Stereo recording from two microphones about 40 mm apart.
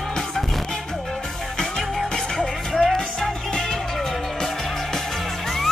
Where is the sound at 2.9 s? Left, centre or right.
Centre.